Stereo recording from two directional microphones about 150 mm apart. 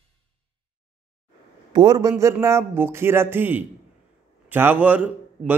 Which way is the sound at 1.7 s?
25° right (ahead or behind).